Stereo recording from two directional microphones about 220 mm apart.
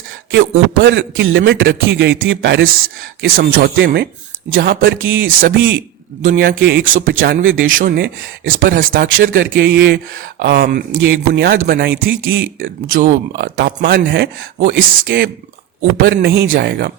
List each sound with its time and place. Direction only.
0.3 s a man's voice: 50° right (ahead or behind); by 2.9 s 70° right (ahead or behind)
3.2 s a man's voice: 40° right (ahead or behind)
6.3 s speech: 55° right (ahead or behind)
7.1 s a man's voice: 40° right (ahead or behind)
9.0 s speech: 65° right (ahead or behind)
9.3 s a man's voice: 50° right (ahead or behind)
12.3 s speech: 60° right (ahead or behind)
13.3 s a man's voice: 50° right (ahead or behind)